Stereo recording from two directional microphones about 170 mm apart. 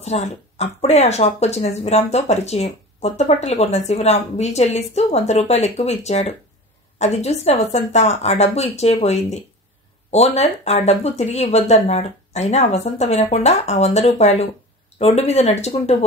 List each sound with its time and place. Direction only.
0.0 s speech: 40° left (ahead or behind)